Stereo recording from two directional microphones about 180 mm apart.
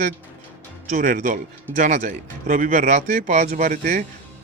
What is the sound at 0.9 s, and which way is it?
A man's voice, 45° right (ahead or behind).